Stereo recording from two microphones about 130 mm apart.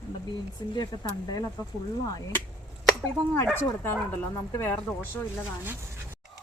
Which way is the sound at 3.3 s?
15° left (ahead or behind).